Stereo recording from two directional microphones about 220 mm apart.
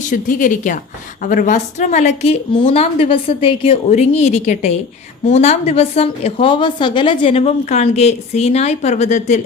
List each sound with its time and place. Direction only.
0.1 s a woman's voice: 35° left (ahead or behind)